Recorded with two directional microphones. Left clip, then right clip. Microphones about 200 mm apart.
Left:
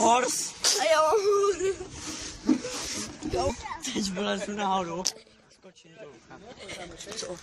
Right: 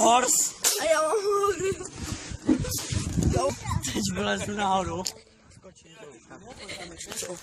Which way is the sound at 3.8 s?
5° right (ahead or behind).